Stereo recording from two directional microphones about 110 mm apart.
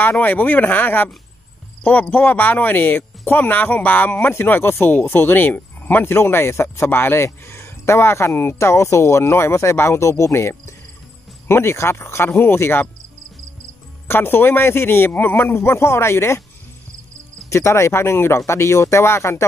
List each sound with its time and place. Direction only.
0.0 s speech: 15° left (ahead or behind)
14.0 s speech: 20° left (ahead or behind)
17.5 s speech: 25° left (ahead or behind)